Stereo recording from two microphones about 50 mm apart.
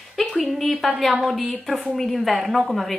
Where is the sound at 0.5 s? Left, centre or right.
Centre.